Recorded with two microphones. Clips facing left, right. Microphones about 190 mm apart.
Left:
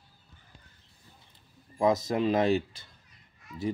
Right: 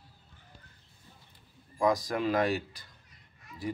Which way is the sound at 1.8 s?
25° left (ahead or behind).